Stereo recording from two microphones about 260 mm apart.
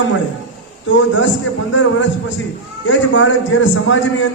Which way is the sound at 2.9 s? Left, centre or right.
Left.